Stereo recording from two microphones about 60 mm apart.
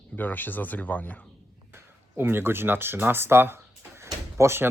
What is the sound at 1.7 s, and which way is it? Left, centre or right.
Speech, right.